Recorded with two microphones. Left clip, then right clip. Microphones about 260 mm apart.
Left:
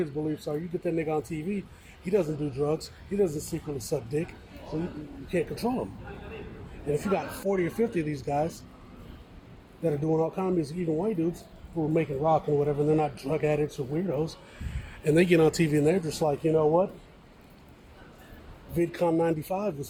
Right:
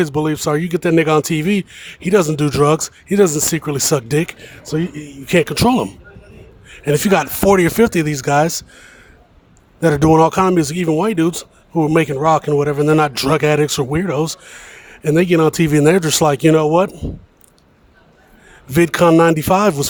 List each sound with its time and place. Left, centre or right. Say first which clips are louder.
0.3 s a man's voice: right 14 dB; right
9.8 s a man's voice: right 15 dB; right
15.0 s a man's voice: right 8 dB; right
18.7 s a man's voice: right 15 dB; right